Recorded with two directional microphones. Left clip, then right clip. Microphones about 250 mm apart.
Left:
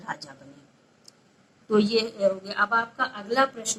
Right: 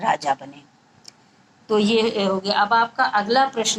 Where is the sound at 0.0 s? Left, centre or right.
Centre.